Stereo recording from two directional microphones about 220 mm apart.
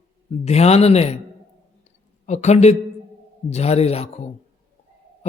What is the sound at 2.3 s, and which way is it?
A man's voice, 30° left (ahead or behind).